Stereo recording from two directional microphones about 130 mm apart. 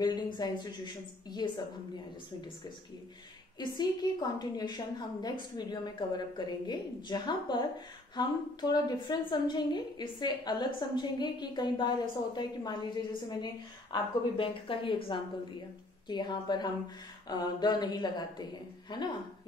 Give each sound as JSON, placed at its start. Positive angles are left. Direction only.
{"t": 0.0, "sound": "a woman's voice", "side_deg": 30}
{"t": 3.5, "sound": "a woman's voice", "side_deg": 35}